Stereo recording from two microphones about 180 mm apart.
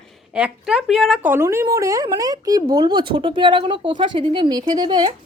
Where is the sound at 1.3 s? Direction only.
15° right (ahead or behind).